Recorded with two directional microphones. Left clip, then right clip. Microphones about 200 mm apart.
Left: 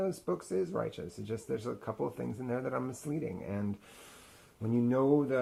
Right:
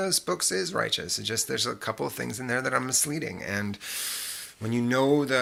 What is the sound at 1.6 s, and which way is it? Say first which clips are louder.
Speech: right 8 dB; 30° right (ahead or behind).